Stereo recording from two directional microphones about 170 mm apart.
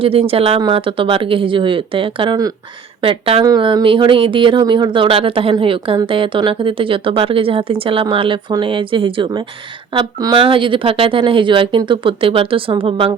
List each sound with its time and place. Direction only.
0.0 s speech: 35° right (ahead or behind)